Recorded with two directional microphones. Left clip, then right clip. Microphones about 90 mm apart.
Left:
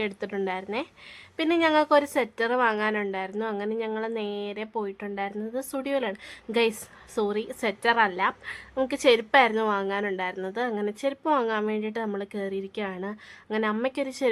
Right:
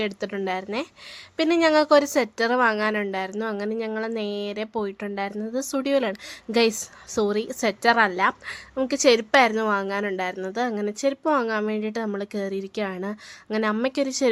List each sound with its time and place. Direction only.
0.0 s a woman's voice: 30° right (ahead or behind)
8.9 s a woman's voice: 30° right (ahead or behind)